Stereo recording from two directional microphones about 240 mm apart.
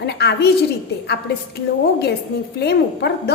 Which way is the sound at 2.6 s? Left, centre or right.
Left.